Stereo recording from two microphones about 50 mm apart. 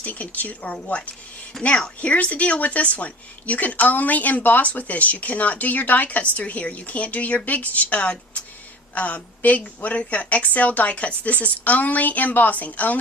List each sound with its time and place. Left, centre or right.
0.0 s speech: left
1.5 s a woman's voice: centre
2.0 s speech: left